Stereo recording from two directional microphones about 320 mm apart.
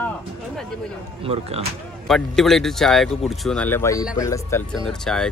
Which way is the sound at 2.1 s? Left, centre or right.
Centre.